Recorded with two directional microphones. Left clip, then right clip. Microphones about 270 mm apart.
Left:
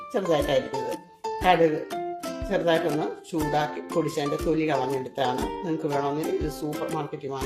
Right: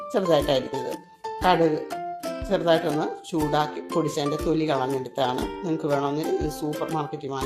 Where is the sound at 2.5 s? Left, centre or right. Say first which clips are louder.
Right 2 dB; centre.